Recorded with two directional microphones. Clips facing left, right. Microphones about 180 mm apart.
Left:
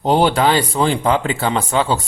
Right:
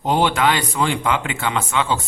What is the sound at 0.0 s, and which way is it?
Speech, 35° left (ahead or behind).